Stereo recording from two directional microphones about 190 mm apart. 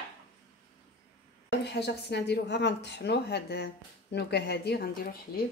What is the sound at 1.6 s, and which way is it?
A woman's voice, 60° left (ahead or behind).